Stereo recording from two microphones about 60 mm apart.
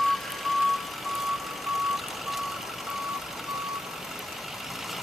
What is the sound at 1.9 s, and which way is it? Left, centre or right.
Reversing beeps, centre.